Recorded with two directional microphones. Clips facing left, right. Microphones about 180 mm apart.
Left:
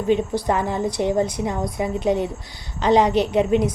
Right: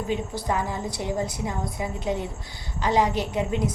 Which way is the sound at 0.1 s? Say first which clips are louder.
Left 9 dB; 20° left (ahead or behind).